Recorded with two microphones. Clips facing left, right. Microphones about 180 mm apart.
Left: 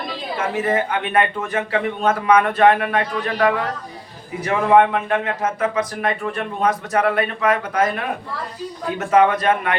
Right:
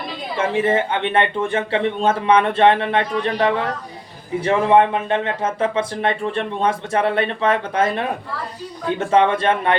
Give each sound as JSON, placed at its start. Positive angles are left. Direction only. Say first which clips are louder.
{"t": 0.3, "sound": "speech", "louder": "right 3 dB", "side_deg": -25}